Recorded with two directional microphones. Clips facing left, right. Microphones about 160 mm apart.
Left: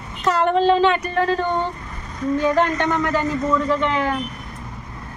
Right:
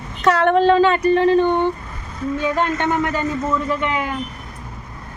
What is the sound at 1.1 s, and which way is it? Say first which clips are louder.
Speech: right 6 dB; 20° right (ahead or behind).